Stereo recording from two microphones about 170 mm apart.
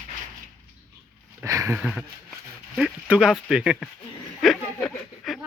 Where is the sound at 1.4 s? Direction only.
20° right (ahead or behind).